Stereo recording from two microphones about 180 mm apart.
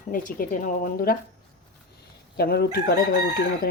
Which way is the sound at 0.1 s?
50° left (ahead or behind).